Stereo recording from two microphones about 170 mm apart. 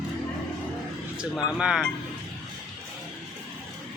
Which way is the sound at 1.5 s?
5° right (ahead or behind).